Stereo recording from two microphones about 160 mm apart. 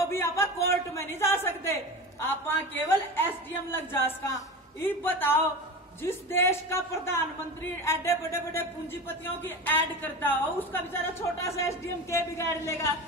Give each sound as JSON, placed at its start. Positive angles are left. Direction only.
{"t": 0.1, "sound": "a woman's voice", "side_deg": 15}